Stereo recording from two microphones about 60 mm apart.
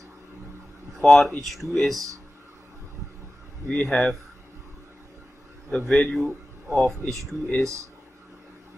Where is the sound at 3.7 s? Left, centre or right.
Centre.